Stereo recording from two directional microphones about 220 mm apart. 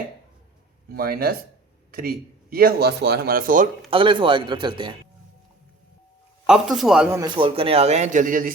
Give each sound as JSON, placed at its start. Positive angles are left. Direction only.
{"t": 0.9, "sound": "a man's voice", "side_deg": -45}
{"t": 3.8, "sound": "a man's voice", "side_deg": -25}
{"t": 6.4, "sound": "a man's voice", "side_deg": 0}
{"t": 7.2, "sound": "a man's voice", "side_deg": -20}